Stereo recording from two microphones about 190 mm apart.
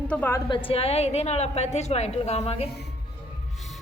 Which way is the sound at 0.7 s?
30° left (ahead or behind).